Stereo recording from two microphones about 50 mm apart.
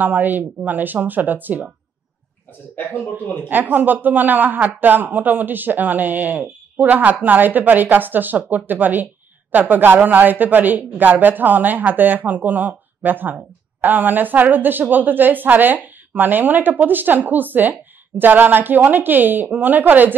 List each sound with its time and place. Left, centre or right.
0.0 s speech: right
2.7 s speech: left
3.4 s speech: right